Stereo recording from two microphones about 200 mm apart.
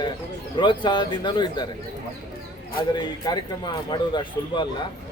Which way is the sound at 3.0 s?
20° left (ahead or behind).